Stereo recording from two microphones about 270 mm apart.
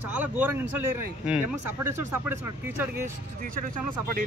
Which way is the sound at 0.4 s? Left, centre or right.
Centre.